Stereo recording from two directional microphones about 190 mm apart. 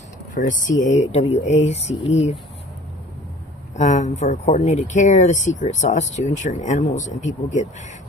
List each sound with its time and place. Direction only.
0.3 s speech: 40° left (ahead or behind)
3.8 s speech: 40° left (ahead or behind)